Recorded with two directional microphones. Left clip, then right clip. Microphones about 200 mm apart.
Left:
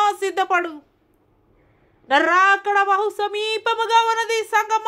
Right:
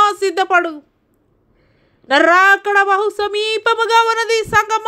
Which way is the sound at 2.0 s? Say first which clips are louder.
Right 5 dB; 20° right (ahead or behind).